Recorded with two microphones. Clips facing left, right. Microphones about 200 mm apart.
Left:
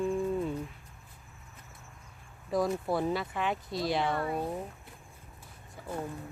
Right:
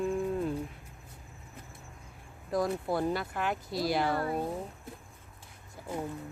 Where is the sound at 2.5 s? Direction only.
Centre (ahead or behind).